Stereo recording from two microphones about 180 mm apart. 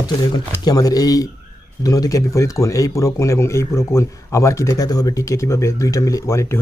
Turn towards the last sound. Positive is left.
turn(degrees=15)  # may be behind; listen again after turning